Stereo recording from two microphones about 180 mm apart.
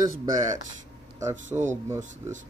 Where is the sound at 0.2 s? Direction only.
20° right (ahead or behind).